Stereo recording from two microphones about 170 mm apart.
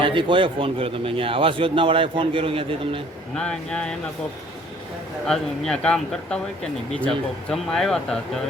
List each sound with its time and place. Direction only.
0.0 s a man's voice: 30° right (ahead or behind)
3.3 s speech: 5° left (ahead or behind)
5.2 s speech: 5° left (ahead or behind)